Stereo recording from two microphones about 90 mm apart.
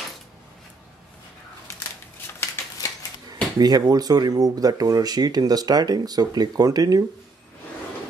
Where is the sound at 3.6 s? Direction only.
45° right (ahead or behind).